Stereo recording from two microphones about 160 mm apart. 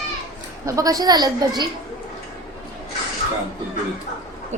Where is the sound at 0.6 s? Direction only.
20° right (ahead or behind).